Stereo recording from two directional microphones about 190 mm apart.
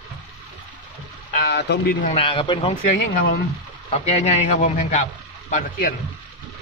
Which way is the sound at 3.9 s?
35° left (ahead or behind).